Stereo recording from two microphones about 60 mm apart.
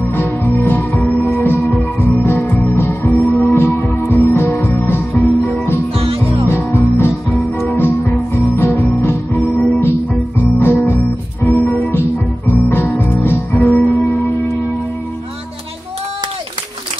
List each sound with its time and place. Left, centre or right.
0.1 s music: left
3.3 s music: left